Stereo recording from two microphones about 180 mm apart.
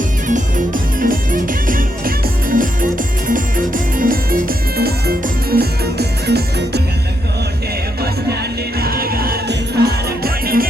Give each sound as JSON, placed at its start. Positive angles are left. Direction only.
{"t": 0.3, "sound": "music", "side_deg": -45}
{"t": 8.8, "sound": "music", "side_deg": -55}